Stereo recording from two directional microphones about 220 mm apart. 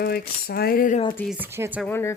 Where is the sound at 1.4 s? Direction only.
10° right (ahead or behind).